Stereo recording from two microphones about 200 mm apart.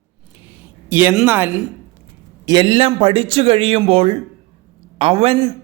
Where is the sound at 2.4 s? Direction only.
20° right (ahead or behind).